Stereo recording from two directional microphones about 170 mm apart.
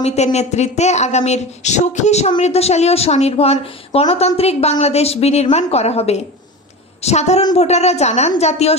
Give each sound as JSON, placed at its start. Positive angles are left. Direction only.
{"t": 0.0, "sound": "a woman's voice", "side_deg": 40}